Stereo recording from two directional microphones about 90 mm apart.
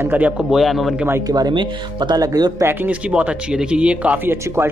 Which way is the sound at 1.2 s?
45° right (ahead or behind).